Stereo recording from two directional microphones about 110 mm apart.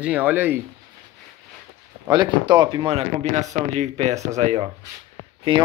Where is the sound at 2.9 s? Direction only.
65° right (ahead or behind); by 4.2 s 90° right.